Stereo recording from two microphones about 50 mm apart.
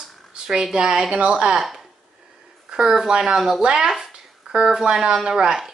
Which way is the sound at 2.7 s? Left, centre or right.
Centre.